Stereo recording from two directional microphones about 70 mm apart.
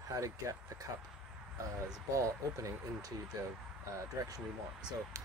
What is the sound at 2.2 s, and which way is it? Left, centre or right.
Speech, right.